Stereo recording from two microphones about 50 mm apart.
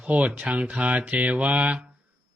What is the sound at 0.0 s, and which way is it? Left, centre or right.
Mantra, right.